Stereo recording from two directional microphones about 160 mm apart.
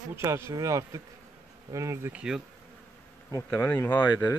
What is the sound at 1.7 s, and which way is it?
Speech, 20° right (ahead or behind).